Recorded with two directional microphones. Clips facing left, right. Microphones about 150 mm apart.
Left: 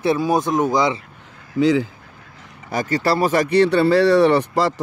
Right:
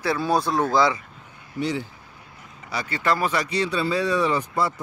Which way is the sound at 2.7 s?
45° left (ahead or behind).